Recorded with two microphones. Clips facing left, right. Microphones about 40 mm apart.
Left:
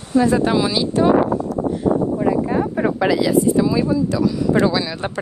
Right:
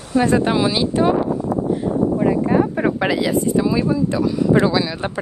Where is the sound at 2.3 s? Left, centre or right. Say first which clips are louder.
Right 2 dB; right.